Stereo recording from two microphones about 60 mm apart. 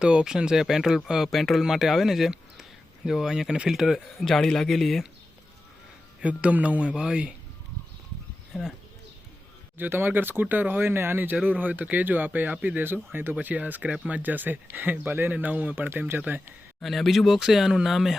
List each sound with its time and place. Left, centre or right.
0.0 s speech: centre
1.3 s speech: centre
6.2 s speech: right
6.9 s speech: centre
8.5 s speech: centre
9.7 s speech: right
16.8 s speech: centre